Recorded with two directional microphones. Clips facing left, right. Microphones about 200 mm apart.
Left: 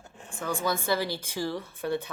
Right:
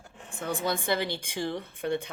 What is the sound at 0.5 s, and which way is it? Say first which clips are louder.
A woman's voice: left 1 dB; 20° right (ahead or behind).